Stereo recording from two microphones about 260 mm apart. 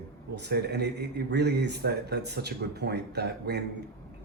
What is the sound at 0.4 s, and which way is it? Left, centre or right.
Speech, right.